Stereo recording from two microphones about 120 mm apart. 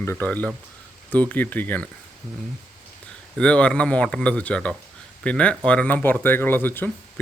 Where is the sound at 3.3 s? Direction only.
10° left (ahead or behind).